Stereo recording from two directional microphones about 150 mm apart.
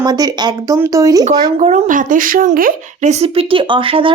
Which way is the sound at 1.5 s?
50° right (ahead or behind).